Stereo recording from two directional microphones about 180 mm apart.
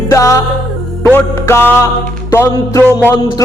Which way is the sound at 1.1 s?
15° left (ahead or behind).